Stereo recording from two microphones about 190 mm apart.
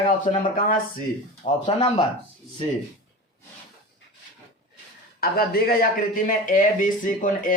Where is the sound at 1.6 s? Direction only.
25° left (ahead or behind).